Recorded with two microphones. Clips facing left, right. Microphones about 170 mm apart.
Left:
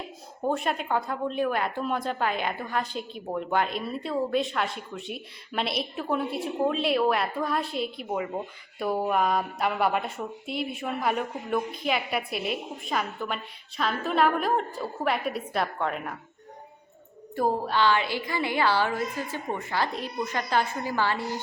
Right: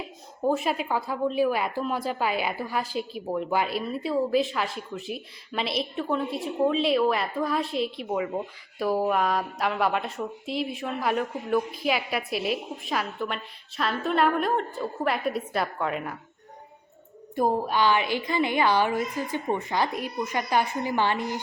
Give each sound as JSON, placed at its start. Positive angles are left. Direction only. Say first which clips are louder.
{"t": 0.4, "sound": "a woman's voice", "louder": "right 2 dB", "side_deg": -5}
{"t": 17.3, "sound": "a woman's voice", "louder": "right 1 dB", "side_deg": -15}